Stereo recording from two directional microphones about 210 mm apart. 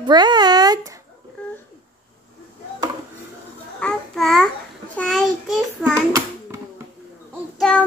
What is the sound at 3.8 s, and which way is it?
Babbling, 5° left (ahead or behind).